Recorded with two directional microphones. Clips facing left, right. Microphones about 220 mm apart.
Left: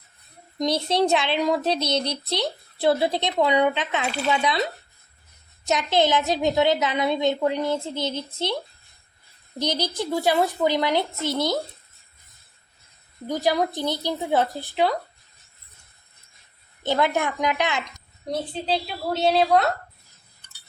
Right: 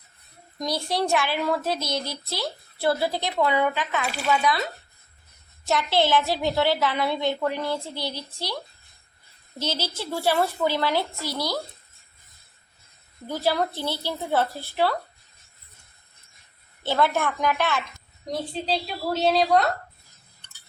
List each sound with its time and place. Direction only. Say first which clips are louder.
0.6 s speech: left 5 dB; 20° left (ahead or behind)
5.6 s speech: left 2 dB; 15° left (ahead or behind)
9.6 s a woman's voice: left 4 dB; 15° left (ahead or behind)
13.2 s a woman's voice: left 2 dB; 15° left (ahead or behind)
16.8 s a woman's voice: left 1 dB; 15° left (ahead or behind)
18.3 s a woman's voice: left 2 dB; centre (ahead or behind)